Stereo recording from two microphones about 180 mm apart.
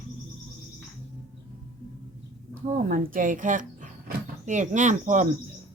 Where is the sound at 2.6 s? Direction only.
45° right (ahead or behind).